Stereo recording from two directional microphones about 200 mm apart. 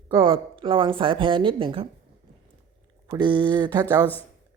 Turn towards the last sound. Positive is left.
turn(degrees=-20)  # may be behind; listen again after turning